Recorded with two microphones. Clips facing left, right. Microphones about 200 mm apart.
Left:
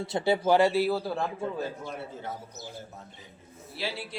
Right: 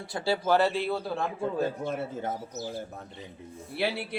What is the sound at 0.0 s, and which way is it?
Speech, 20° left (ahead or behind).